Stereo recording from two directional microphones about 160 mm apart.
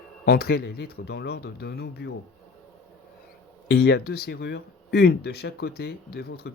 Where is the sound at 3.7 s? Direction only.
90° left.